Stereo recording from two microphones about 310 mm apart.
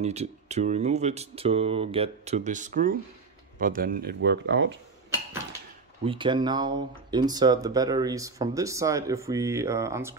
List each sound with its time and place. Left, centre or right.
0.0 s speech: right
6.0 s speech: centre